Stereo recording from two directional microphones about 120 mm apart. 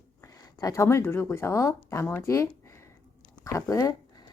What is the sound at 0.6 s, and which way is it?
A woman's voice, 25° left (ahead or behind).